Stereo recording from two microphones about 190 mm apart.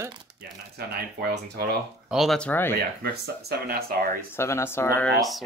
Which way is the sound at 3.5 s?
55° right (ahead or behind).